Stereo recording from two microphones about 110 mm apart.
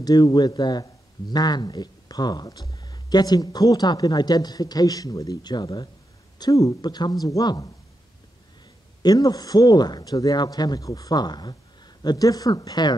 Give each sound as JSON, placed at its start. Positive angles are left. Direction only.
{"t": 0.0, "sound": "speech", "side_deg": 35}
{"t": 9.0, "sound": "speech", "side_deg": 35}